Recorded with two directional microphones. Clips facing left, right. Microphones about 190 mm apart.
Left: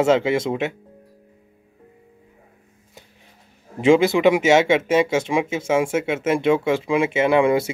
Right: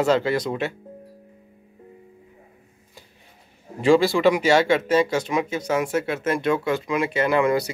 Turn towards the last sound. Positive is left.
turn(degrees=25)  # may be behind; listen again after turning